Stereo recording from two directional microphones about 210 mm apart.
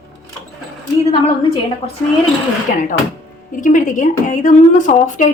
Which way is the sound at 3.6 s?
40° left (ahead or behind).